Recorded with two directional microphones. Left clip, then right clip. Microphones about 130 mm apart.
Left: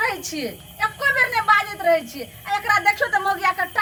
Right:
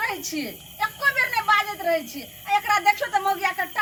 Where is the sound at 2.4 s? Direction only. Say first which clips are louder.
Left 1 dB; centre (ahead or behind).